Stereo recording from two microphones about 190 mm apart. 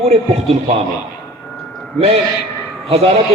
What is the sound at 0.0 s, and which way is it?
Speech, 30° right (ahead or behind).